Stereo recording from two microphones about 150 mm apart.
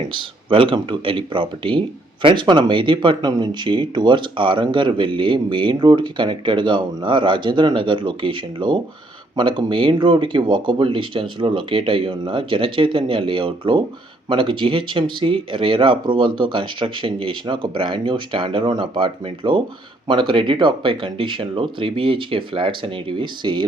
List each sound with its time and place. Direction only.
0.1 s speech: 35° right (ahead or behind)